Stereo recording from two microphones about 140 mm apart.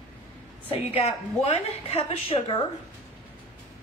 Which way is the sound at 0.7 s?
45° left (ahead or behind).